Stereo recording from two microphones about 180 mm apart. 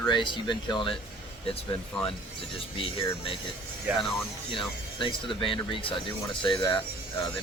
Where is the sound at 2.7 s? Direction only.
30° left (ahead or behind).